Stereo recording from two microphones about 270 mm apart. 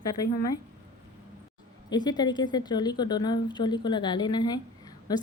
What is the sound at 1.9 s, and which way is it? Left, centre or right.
A woman's voice, centre.